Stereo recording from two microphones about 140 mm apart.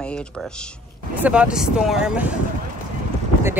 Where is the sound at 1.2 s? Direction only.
10° right (ahead or behind).